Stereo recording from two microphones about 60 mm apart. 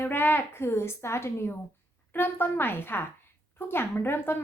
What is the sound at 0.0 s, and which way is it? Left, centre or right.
A child's voice, left.